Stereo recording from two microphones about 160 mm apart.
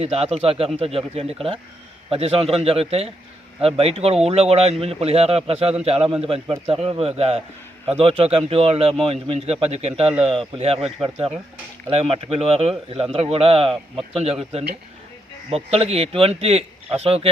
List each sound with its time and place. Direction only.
0.0 s a man's voice: 40° right (ahead or behind)
11.9 s a man's voice: 40° right (ahead or behind)